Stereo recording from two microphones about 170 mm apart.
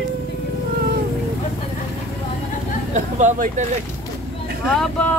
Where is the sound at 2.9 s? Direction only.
45° right (ahead or behind).